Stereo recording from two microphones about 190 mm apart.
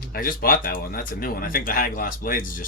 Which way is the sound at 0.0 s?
50° left (ahead or behind).